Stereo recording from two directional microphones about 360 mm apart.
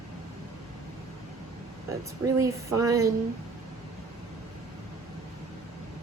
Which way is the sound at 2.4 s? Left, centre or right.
Centre.